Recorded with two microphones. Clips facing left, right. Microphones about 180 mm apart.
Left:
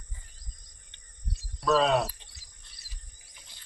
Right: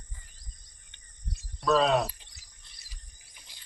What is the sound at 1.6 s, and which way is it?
Speech, centre (ahead or behind).